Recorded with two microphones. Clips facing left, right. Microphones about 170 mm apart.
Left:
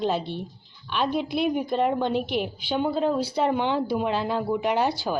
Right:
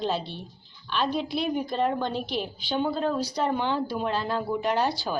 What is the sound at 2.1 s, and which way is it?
Speech, 60° left (ahead or behind).